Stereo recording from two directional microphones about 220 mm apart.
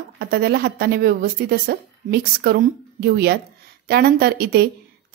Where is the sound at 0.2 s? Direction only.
45° right (ahead or behind).